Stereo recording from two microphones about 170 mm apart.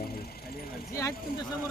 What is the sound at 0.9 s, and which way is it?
Vehicle, 20° left (ahead or behind).